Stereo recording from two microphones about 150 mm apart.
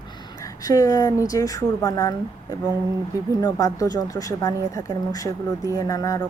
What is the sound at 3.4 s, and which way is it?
Speech, 25° left (ahead or behind).